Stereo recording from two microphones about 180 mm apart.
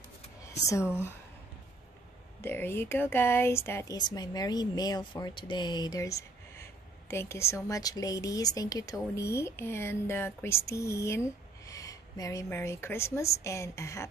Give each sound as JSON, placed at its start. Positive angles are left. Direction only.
{"t": 2.4, "sound": "speech", "side_deg": 10}